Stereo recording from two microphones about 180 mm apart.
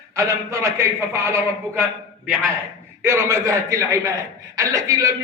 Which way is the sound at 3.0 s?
15° right (ahead or behind).